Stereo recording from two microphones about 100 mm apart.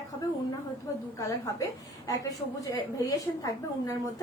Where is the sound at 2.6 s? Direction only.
35° left (ahead or behind).